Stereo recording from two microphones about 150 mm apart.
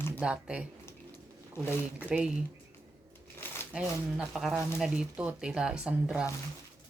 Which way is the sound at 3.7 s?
5° right (ahead or behind).